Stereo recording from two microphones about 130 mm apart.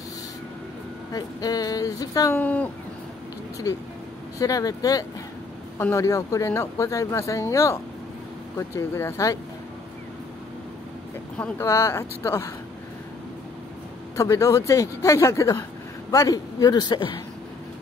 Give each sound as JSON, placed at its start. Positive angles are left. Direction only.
{"t": 1.1, "sound": "speech", "side_deg": 30}
{"t": 2.3, "sound": "speech", "side_deg": 10}
{"t": 3.7, "sound": "speech", "side_deg": 25}
{"t": 11.3, "sound": "speech", "side_deg": 10}
{"t": 11.6, "sound": "speech", "side_deg": 20}
{"t": 14.1, "sound": "speech", "side_deg": 25}